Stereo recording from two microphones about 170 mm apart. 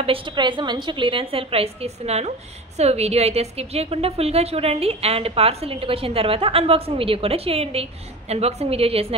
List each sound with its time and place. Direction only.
0.0 s a woman's voice: 30° right (ahead or behind)